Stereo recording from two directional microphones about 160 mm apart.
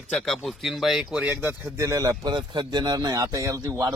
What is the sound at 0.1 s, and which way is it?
Speech, centre (ahead or behind).